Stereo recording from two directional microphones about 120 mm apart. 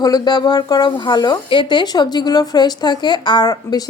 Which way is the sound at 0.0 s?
35° left (ahead or behind).